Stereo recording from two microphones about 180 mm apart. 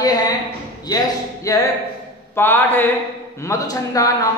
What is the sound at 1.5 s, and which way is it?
A man's voice, 20° left (ahead or behind).